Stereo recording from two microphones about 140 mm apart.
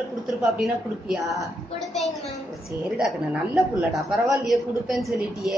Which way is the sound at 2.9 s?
5° right (ahead or behind).